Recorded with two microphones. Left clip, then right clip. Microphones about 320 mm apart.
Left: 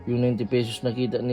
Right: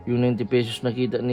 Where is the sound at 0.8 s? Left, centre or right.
Right.